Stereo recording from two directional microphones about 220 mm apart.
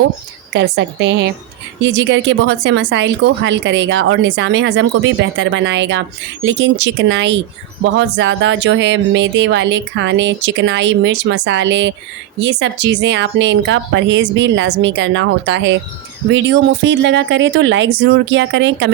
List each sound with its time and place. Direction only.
0.5 s speech: 55° right (ahead or behind)